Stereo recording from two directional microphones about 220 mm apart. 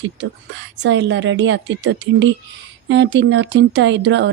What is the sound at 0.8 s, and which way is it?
A woman's voice, 55° right (ahead or behind).